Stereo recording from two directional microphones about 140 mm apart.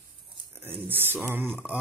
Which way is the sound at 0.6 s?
15° right (ahead or behind).